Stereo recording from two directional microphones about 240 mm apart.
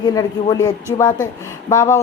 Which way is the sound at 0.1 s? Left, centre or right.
Centre.